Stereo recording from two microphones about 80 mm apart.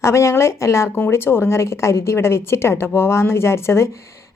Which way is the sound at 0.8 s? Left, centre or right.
Left.